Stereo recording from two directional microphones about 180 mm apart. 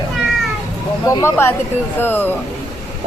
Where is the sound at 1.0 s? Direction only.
15° left (ahead or behind).